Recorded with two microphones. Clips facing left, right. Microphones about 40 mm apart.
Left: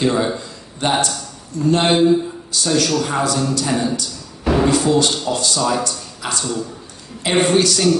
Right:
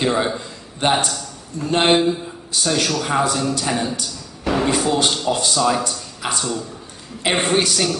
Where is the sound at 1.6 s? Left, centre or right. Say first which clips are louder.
Left 2 dB; right.